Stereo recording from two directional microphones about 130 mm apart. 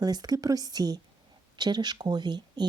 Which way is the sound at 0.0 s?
30° right (ahead or behind).